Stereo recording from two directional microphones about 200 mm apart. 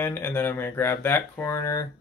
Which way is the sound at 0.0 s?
10° left (ahead or behind).